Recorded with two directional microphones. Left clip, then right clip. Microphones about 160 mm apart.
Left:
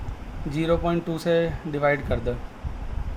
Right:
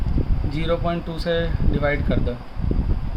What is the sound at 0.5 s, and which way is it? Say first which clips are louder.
Speech: even; 25° left (ahead or behind).